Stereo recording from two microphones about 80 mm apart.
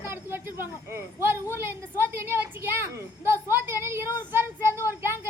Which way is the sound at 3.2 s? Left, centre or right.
Right.